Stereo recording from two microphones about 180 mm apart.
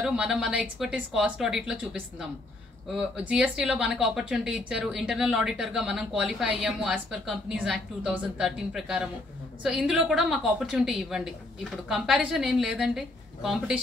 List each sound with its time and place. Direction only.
0.0 s speech: 5° right (ahead or behind)